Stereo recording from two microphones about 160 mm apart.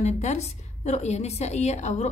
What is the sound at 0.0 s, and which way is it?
A woman's voice, 45° left (ahead or behind).